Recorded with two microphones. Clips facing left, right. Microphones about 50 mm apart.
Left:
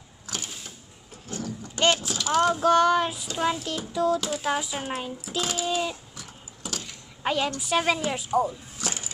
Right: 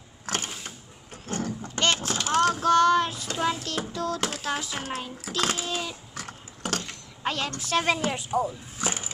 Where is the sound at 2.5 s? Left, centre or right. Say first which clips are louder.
Even; centre.